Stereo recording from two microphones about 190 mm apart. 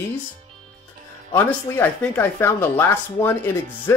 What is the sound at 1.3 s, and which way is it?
Speech, 10° left (ahead or behind).